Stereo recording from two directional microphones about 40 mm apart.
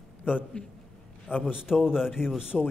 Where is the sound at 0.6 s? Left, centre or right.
Left.